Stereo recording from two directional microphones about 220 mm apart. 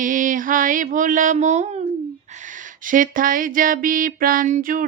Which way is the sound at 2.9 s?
40° right (ahead or behind).